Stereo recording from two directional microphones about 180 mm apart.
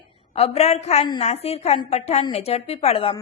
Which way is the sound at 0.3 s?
35° left (ahead or behind).